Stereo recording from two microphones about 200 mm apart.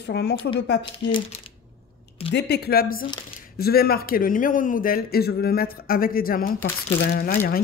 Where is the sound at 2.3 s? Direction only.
55° left (ahead or behind).